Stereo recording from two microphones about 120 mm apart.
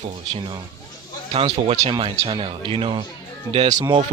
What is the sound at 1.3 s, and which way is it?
Speech, 55° right (ahead or behind).